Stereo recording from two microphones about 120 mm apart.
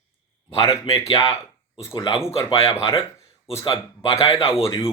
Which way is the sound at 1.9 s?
45° left (ahead or behind).